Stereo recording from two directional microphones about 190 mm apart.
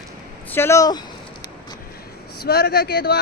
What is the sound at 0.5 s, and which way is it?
Speech, 15° left (ahead or behind).